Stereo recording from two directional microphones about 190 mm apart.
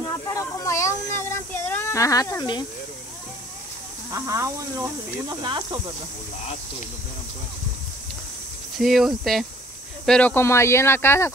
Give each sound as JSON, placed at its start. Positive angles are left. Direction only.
{"t": 0.3, "sound": "a sound", "side_deg": 15}
{"t": 4.1, "sound": "speech", "side_deg": -15}
{"t": 8.7, "sound": "speech", "side_deg": 0}